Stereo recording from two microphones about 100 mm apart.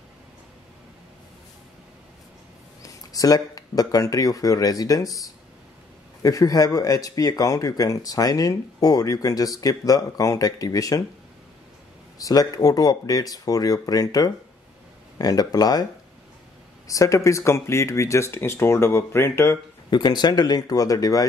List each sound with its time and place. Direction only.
2.8 s speech: 35° left (ahead or behind)
6.2 s speech: 35° left (ahead or behind)
12.2 s speech: 40° left (ahead or behind)
19.9 s speech: 45° left (ahead or behind)